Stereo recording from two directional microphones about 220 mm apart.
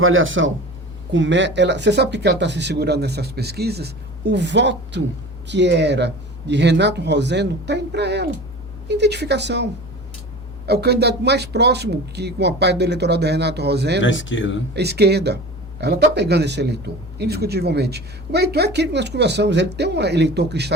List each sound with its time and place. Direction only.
0.0 s a man's voice: 65° right (ahead or behind)
10.7 s a man's voice: 45° right (ahead or behind)
14.0 s speech: 60° left (ahead or behind)
14.7 s a man's voice: 50° right (ahead or behind)